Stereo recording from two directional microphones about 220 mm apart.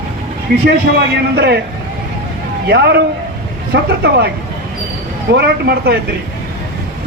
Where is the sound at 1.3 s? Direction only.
50° right (ahead or behind).